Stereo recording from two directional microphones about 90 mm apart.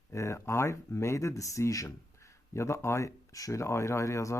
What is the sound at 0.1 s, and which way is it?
Speech, 30° left (ahead or behind).